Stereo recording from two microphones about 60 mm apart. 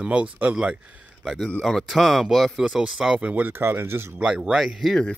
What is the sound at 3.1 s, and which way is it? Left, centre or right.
Speech, right.